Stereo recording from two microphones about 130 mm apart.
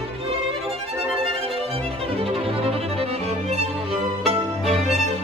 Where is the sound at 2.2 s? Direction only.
45° right (ahead or behind).